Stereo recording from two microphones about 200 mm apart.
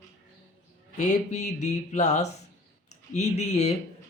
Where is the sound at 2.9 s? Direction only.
35° left (ahead or behind).